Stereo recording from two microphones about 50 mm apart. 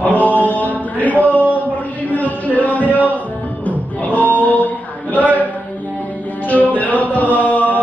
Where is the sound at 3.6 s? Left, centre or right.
Left.